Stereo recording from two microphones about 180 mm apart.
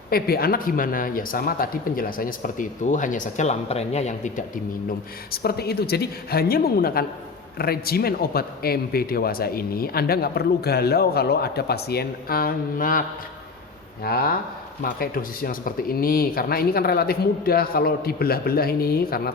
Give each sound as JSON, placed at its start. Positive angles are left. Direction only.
{"t": 0.1, "sound": "speech", "side_deg": 55}
{"t": 5.3, "sound": "speech", "side_deg": 60}
{"t": 14.0, "sound": "speech", "side_deg": 55}